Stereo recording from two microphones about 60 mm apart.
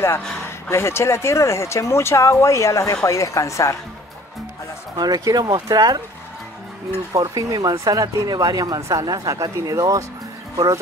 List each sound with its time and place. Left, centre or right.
0.7 s speech: left
5.0 s speech: right
7.2 s speech: right